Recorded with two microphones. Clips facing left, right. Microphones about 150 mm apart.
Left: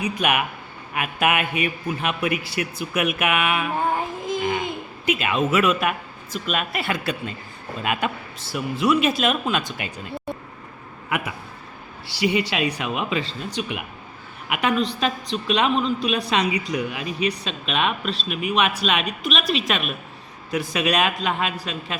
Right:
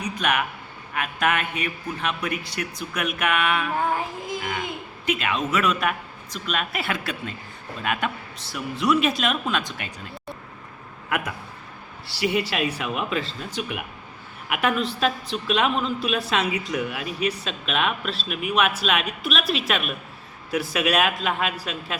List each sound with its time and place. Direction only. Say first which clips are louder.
0.0 s a man's voice: left 2 dB; 10° left (ahead or behind)
3.9 s child singing: left 3 dB; 20° left (ahead or behind)
5.0 s a woman's voice: left 3 dB; 5° left (ahead or behind)
11.1 s a woman's voice: even; 5° left (ahead or behind)